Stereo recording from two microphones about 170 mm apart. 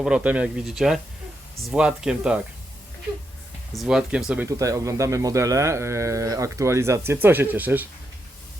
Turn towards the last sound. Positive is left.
turn(degrees=-10)  # may be behind; listen again after turning